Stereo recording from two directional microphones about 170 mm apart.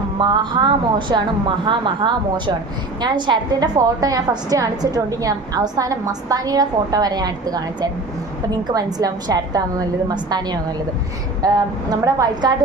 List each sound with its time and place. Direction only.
0.2 s a woman's voice: 25° right (ahead or behind)